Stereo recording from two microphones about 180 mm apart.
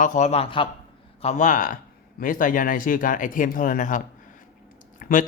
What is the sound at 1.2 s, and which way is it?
Speech, 40° left (ahead or behind).